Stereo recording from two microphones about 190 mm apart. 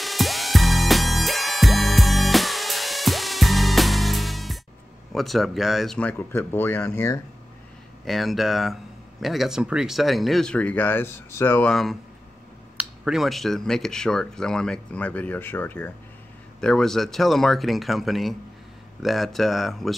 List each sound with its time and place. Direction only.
0.0 s music: centre (ahead or behind)
5.1 s speech: centre (ahead or behind)
8.0 s speech: centre (ahead or behind)